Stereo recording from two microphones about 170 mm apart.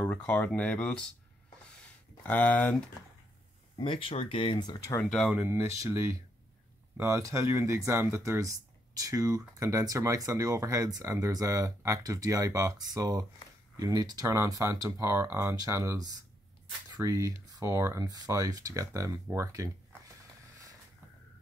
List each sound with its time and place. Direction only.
0.0 s speech: 10° left (ahead or behind)
2.2 s speech: 10° left (ahead or behind)
3.7 s speech: 30° left (ahead or behind)
5.1 s speech: 5° right (ahead or behind)